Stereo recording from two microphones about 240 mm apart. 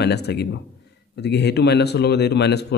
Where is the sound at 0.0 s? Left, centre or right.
Left.